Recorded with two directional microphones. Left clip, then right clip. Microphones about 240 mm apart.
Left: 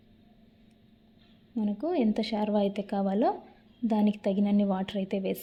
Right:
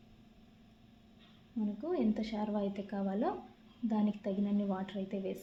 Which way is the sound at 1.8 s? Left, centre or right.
Left.